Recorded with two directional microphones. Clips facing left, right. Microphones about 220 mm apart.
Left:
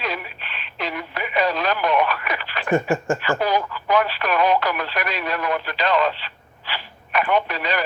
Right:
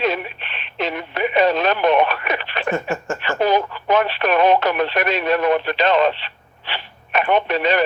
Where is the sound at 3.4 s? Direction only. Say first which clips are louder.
Right 4 dB; 25° right (ahead or behind).